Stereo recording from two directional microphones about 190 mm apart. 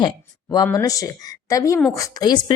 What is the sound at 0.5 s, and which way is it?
A woman's voice, 20° left (ahead or behind).